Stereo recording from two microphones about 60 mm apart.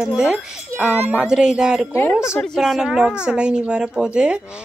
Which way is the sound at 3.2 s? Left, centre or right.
Centre.